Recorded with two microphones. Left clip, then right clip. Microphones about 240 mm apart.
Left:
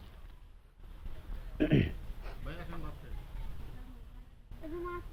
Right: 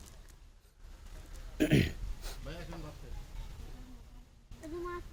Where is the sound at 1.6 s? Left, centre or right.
Centre.